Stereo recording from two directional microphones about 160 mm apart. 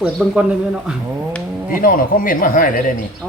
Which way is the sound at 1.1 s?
15° right (ahead or behind).